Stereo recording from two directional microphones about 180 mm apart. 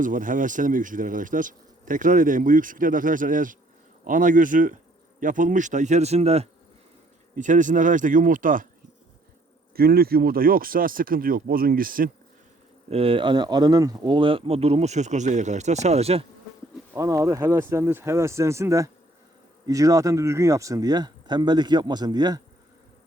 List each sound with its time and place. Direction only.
0.0 s speech: 45° right (ahead or behind)
9.7 s speech: 60° right (ahead or behind)
12.9 s speech: 30° right (ahead or behind)
16.9 s speech: 20° right (ahead or behind)